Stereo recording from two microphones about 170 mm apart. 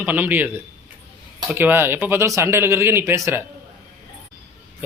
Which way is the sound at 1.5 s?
10° right (ahead or behind).